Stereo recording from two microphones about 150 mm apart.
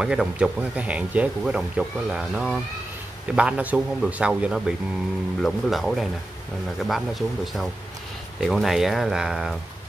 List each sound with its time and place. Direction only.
0.0 s speech: 5° right (ahead or behind)